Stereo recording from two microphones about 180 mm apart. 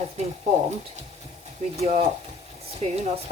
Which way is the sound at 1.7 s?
35° right (ahead or behind).